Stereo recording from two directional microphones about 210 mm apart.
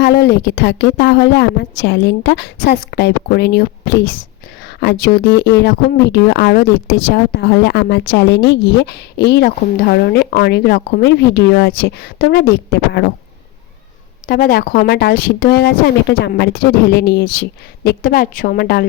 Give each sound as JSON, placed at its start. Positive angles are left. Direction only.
{"t": 0.0, "sound": "speech", "side_deg": 55}
{"t": 14.3, "sound": "speech", "side_deg": 40}